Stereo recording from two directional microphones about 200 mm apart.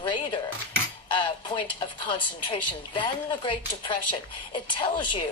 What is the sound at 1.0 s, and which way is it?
Speech, 25° left (ahead or behind).